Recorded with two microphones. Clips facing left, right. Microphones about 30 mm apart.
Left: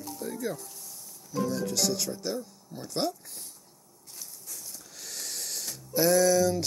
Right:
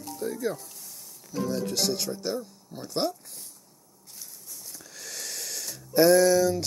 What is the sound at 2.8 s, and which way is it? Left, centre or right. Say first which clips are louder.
Speech: right 2 dB; centre.